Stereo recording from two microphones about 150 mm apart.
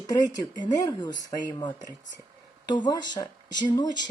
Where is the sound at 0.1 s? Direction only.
30° left (ahead or behind).